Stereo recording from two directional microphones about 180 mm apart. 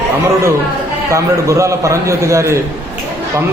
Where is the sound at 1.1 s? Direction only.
15° right (ahead or behind).